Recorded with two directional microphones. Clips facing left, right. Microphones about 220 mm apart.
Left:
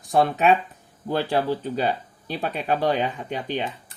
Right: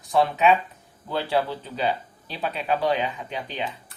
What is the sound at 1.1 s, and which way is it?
Speech, 45° left (ahead or behind).